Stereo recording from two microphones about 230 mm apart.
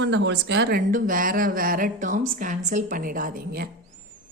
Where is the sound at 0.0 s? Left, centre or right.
Right.